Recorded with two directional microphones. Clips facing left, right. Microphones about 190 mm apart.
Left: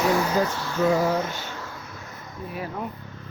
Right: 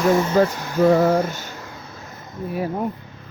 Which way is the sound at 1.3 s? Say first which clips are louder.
Right 2 dB; 45° right (ahead or behind).